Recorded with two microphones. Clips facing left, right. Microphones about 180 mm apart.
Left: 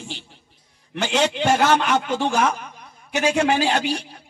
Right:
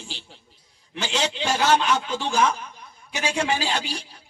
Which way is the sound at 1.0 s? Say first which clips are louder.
Left 6 dB; 55° left (ahead or behind).